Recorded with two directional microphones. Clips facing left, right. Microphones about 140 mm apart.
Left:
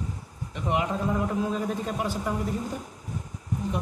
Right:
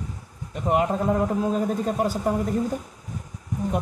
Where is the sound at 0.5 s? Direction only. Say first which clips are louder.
Right 5 dB; 40° right (ahead or behind).